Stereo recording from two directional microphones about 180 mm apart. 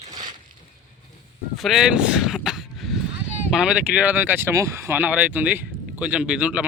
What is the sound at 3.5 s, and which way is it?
Speech, 5° right (ahead or behind).